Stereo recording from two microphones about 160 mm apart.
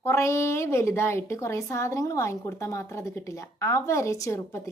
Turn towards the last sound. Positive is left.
turn(degrees=15)  # may be behind; listen again after turning